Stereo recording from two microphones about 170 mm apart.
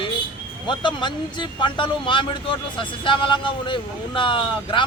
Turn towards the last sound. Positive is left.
turn(degrees=30)  # may be behind; listen again after turning